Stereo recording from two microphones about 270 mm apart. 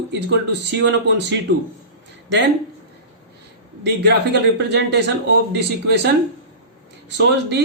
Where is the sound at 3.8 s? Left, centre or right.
Right.